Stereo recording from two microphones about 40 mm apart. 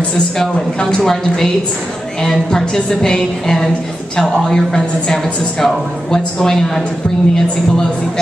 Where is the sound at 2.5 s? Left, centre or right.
Centre.